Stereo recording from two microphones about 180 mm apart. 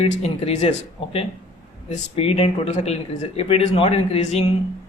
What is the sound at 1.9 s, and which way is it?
Speech, 35° left (ahead or behind).